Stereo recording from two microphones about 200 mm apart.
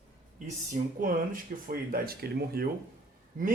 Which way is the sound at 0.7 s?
40° right (ahead or behind).